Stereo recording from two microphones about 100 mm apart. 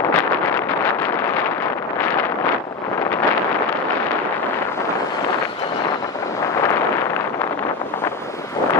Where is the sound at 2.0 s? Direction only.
20° left (ahead or behind).